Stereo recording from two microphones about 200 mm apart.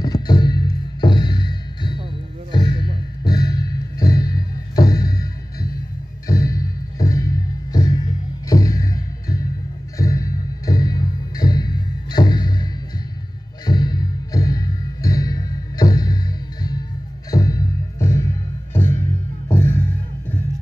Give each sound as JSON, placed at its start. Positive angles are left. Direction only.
{"t": 0.0, "sound": "music", "side_deg": 20}
{"t": 2.5, "sound": "a sound", "side_deg": 20}
{"t": 3.3, "sound": "music", "side_deg": 20}
{"t": 13.7, "sound": "music", "side_deg": 20}
{"t": 19.5, "sound": "music", "side_deg": 10}